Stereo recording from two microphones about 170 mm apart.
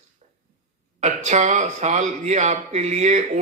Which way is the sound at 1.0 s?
45° right (ahead or behind).